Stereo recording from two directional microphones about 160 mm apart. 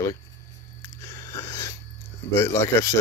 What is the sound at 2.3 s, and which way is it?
Speech, 15° left (ahead or behind).